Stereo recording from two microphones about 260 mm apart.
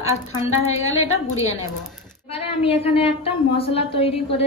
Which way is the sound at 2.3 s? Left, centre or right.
Left.